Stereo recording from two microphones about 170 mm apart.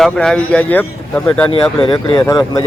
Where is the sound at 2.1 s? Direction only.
20° left (ahead or behind).